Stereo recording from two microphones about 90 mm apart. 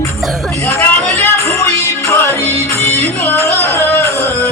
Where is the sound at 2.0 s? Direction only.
30° left (ahead or behind).